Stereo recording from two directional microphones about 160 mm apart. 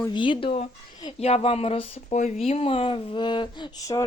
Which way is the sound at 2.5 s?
40° left (ahead or behind).